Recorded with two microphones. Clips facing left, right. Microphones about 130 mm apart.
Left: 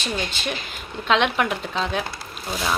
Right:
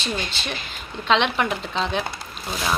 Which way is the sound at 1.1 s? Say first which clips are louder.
Even; 5° left (ahead or behind).